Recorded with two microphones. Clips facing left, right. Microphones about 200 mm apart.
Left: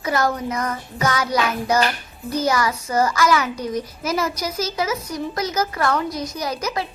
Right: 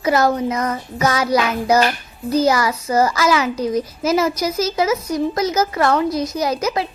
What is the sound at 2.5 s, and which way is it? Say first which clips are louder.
Speech: right 3 dB; 25° right (ahead or behind).